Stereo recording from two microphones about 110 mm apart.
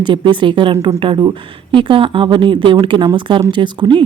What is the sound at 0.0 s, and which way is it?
A woman's voice, 45° right (ahead or behind).